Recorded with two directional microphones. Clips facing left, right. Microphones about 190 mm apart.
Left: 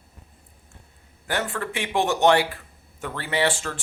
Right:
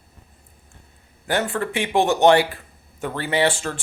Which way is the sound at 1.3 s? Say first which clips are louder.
Right 5 dB; 25° right (ahead or behind).